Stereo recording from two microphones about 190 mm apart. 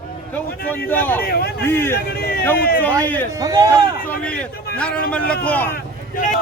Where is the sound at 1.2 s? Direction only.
55° left (ahead or behind).